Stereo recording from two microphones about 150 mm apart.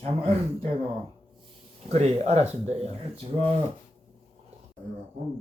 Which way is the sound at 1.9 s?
45° right (ahead or behind).